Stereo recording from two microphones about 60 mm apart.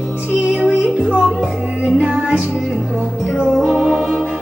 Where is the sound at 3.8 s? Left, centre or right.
Centre.